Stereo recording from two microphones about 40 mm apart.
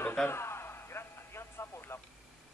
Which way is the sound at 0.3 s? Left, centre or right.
Left.